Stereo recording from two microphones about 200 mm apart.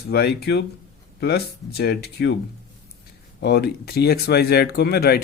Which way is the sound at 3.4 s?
55° left (ahead or behind).